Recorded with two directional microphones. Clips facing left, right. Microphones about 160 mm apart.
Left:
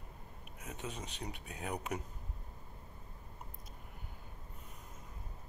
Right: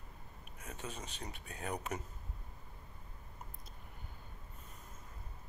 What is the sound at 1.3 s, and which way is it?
Speech, 5° left (ahead or behind).